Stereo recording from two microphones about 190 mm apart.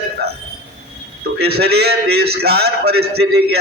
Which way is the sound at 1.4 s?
55° right (ahead or behind).